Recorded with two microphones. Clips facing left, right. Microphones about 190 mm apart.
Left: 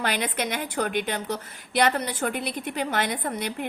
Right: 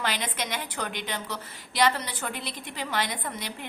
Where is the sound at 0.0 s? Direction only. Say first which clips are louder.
Left 4 dB; 50° left (ahead or behind).